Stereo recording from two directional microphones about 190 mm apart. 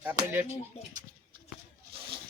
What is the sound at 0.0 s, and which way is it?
Speech, 10° right (ahead or behind).